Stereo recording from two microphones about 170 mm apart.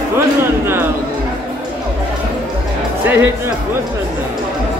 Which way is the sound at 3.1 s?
15° right (ahead or behind).